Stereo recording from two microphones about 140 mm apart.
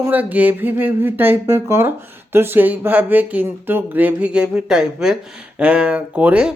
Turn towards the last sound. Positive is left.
turn(degrees=-10)  # may be behind; listen again after turning